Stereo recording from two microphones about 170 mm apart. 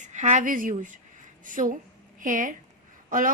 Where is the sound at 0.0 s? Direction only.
45° right (ahead or behind).